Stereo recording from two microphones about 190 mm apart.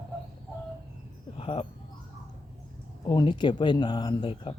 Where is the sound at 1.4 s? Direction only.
30° left (ahead or behind).